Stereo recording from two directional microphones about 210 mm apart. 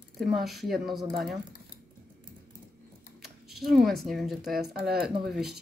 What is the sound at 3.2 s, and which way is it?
Typing, centre (ahead or behind).